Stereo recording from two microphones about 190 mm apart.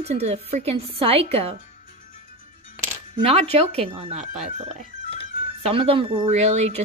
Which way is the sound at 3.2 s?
30° right (ahead or behind).